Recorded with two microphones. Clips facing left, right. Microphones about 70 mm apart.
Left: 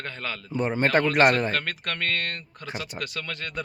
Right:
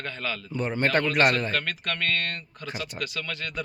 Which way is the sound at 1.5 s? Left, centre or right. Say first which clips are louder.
Even; left.